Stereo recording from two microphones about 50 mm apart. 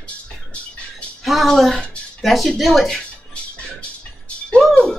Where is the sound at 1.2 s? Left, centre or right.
Centre.